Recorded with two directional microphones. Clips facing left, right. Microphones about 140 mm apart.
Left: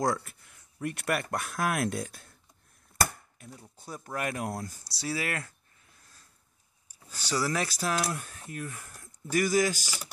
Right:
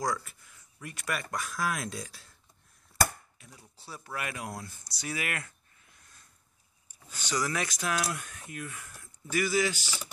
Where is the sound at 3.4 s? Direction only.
50° left (ahead or behind).